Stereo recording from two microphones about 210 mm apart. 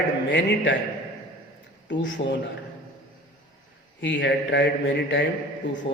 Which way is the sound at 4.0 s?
60° left (ahead or behind).